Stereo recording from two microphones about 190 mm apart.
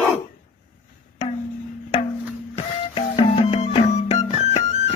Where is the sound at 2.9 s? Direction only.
30° left (ahead or behind).